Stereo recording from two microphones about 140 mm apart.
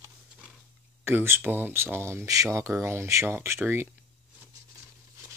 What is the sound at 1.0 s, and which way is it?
Speech, 15° right (ahead or behind).